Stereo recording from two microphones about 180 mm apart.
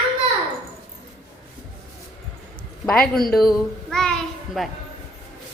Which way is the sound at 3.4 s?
Centre (ahead or behind).